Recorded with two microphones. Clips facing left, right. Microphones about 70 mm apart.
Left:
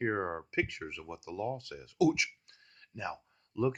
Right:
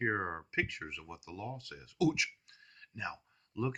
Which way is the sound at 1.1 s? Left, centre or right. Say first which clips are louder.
Left 10 dB; left.